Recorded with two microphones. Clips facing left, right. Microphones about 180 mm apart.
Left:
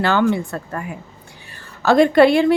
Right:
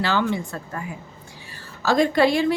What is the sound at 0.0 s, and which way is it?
A woman's voice, 55° left (ahead or behind).